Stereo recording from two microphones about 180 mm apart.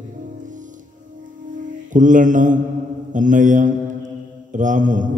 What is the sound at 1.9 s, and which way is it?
A man's voice, 45° right (ahead or behind).